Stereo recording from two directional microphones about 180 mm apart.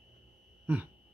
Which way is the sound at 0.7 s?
10° right (ahead or behind).